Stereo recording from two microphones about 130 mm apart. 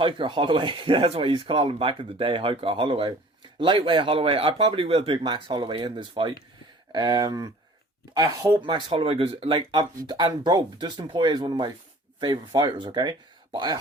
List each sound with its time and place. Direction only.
0.0 s speech: 40° right (ahead or behind)
8.6 s speech: 40° right (ahead or behind)